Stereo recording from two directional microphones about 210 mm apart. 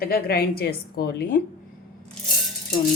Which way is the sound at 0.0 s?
45° left (ahead or behind).